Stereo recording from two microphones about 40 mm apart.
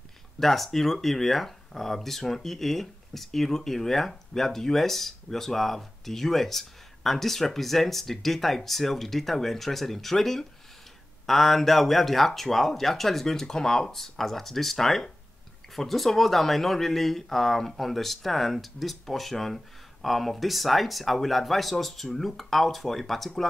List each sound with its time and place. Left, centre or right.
0.4 s speech: centre